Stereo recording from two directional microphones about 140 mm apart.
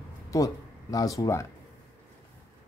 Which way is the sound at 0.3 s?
25° left (ahead or behind).